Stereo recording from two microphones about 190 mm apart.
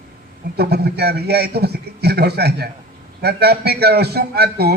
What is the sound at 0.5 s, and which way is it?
A man's voice, 55° right (ahead or behind).